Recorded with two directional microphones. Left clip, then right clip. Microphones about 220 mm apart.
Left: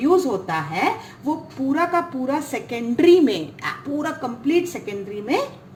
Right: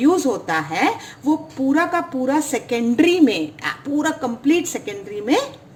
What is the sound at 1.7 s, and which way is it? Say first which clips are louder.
A woman's voice: right 1 dB; 30° right (ahead or behind).